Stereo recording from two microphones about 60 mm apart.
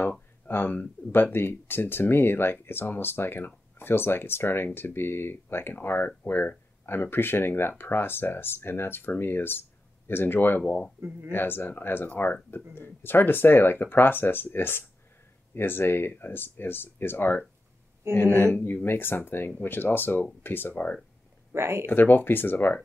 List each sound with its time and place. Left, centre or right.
0.5 s speech: left
11.0 s speech: right
11.3 s speech: left
21.5 s speech: right
21.8 s speech: left